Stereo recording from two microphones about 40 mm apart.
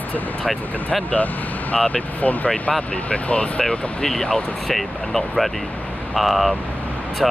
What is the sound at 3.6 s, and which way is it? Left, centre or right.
Speech, centre.